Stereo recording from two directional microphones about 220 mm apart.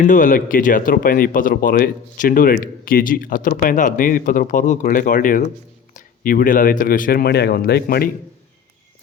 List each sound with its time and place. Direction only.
0.0 s speech: 35° left (ahead or behind)